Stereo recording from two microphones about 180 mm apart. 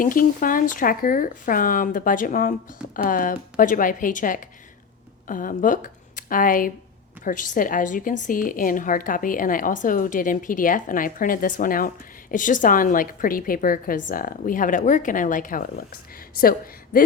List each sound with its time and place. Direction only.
0.0 s a woman's voice: 50° left (ahead or behind)